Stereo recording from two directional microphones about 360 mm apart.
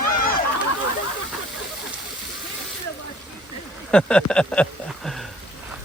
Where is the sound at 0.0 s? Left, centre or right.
Left.